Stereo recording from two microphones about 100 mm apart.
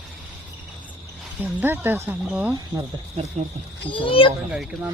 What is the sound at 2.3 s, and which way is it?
Speech, 10° right (ahead or behind).